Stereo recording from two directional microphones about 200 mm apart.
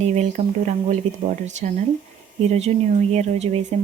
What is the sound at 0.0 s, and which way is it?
Speech, 35° right (ahead or behind).